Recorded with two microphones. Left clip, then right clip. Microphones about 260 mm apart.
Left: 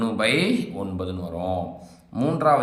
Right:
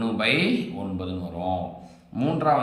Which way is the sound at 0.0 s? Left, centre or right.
Centre.